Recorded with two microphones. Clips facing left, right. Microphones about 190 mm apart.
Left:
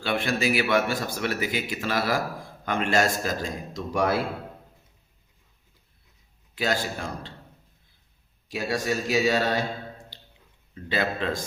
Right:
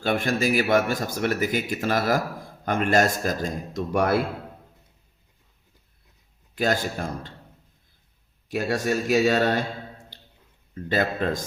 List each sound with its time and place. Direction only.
0.0 s a man's voice: 45° right (ahead or behind)
6.6 s a man's voice: 50° right (ahead or behind)
8.4 s a man's voice: 55° right (ahead or behind)
10.8 s a man's voice: 45° right (ahead or behind)